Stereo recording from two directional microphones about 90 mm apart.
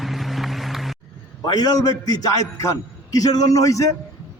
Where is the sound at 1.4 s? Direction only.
45° left (ahead or behind).